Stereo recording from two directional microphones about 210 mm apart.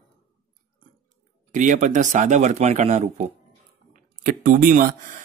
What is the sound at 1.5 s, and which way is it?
Speech, 35° right (ahead or behind).